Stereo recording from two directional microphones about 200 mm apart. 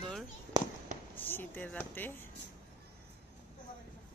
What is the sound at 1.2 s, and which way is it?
Speech, 10° left (ahead or behind).